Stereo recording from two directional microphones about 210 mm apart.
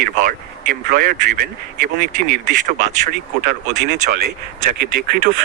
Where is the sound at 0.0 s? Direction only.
40° right (ahead or behind).